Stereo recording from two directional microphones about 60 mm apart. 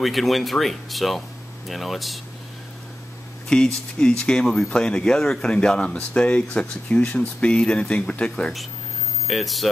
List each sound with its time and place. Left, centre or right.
0.0 s speech: centre
3.4 s speech: centre
9.3 s speech: centre